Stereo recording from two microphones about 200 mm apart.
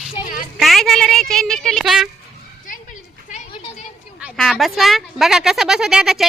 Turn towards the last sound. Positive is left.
turn(degrees=0)  # may be behind; listen again after turning